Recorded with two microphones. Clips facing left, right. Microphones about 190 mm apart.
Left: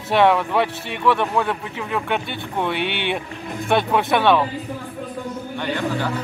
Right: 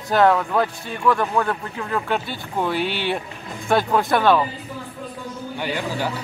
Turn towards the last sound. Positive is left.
turn(degrees=-10)  # may be behind; listen again after turning